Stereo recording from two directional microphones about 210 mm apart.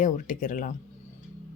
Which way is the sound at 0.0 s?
40° left (ahead or behind).